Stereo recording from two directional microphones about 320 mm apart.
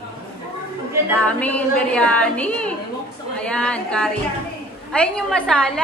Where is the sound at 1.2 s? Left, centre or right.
Centre.